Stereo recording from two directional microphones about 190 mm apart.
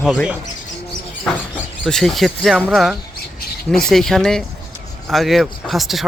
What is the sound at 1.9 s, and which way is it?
Speech, centre (ahead or behind).